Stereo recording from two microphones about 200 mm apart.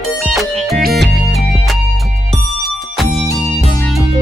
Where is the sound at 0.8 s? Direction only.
55° right (ahead or behind).